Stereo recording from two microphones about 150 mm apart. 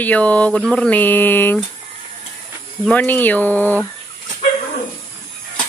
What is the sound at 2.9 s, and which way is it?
Speech, 10° left (ahead or behind).